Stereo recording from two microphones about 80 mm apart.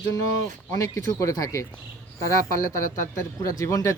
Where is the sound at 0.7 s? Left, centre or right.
Left.